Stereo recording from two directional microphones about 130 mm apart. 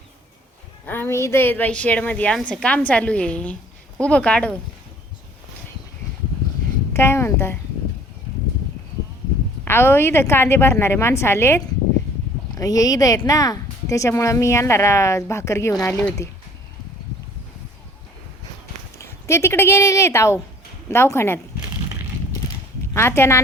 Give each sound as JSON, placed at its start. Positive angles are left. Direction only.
{"t": 0.9, "sound": "a woman's voice", "side_deg": 20}
{"t": 6.9, "sound": "speech", "side_deg": 20}
{"t": 9.6, "sound": "speech", "side_deg": 20}
{"t": 18.9, "sound": "speech", "side_deg": 20}
{"t": 23.0, "sound": "speech", "side_deg": 20}